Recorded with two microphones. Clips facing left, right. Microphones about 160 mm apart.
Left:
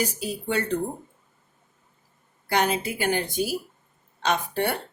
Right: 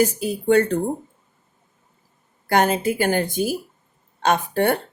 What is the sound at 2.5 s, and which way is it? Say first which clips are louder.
Speech: right 5 dB; 50° right (ahead or behind).